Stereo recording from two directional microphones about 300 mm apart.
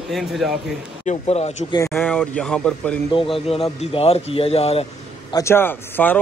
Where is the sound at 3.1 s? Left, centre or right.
Centre.